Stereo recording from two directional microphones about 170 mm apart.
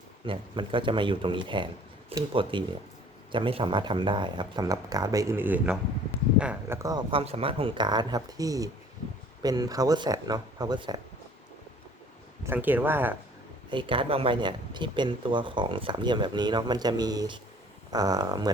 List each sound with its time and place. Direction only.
0.3 s speech: 30° right (ahead or behind); by 6.7 s 5° right (ahead or behind)
6.8 s speech: 25° right (ahead or behind)
12.5 s speech: 10° right (ahead or behind)
13.7 s speech: 30° right (ahead or behind)